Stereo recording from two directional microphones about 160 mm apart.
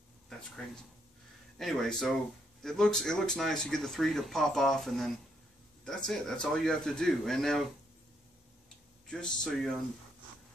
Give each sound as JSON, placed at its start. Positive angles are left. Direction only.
{"t": 0.3, "sound": "a sound", "side_deg": 5}
{"t": 1.6, "sound": "speech", "side_deg": 5}
{"t": 9.0, "sound": "speech", "side_deg": 5}